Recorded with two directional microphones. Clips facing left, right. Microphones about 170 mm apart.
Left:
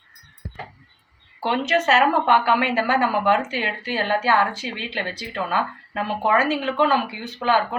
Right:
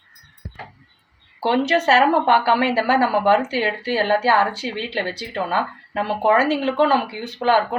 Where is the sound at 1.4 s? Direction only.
35° right (ahead or behind).